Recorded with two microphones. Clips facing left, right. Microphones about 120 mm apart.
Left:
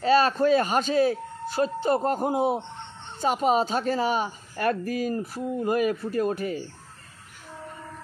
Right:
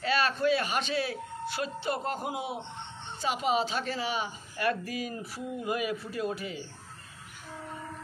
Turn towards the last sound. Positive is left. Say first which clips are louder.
# left 7 dB
turn(degrees=50)  # may be behind; listen again after turning